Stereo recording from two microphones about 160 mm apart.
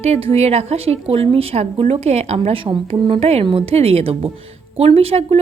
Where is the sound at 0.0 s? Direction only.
40° right (ahead or behind).